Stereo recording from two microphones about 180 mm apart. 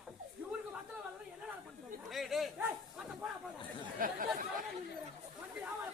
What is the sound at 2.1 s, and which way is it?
Speech, centre (ahead or behind).